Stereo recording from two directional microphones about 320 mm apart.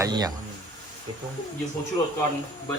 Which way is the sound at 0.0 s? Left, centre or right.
Centre.